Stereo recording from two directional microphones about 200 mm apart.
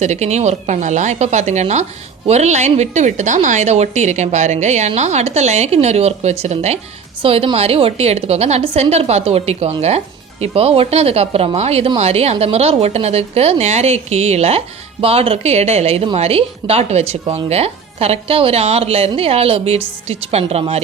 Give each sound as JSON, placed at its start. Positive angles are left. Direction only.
{"t": 0.0, "sound": "speech", "side_deg": -35}